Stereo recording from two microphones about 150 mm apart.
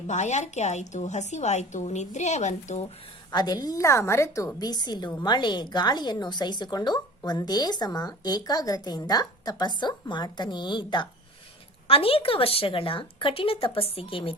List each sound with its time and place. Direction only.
0.1 s a woman's voice: 50° left (ahead or behind)
3.3 s speech: 25° left (ahead or behind)